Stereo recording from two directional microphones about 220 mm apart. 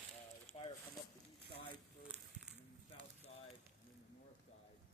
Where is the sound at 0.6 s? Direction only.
25° left (ahead or behind).